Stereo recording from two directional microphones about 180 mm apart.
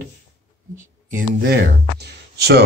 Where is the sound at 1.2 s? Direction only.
55° right (ahead or behind).